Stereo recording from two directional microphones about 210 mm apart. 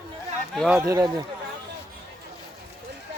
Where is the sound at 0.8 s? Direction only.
15° right (ahead or behind).